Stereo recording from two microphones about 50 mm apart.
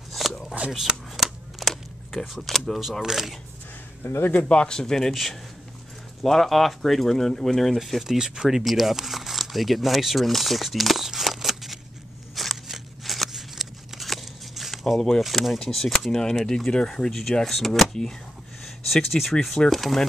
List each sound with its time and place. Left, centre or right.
0.1 s shuffling cards: centre
2.8 s speech: centre
4.0 s speech: left
4.5 s speech: centre
12.6 s a sound: centre
15.0 s speech: centre
17.1 s speech: centre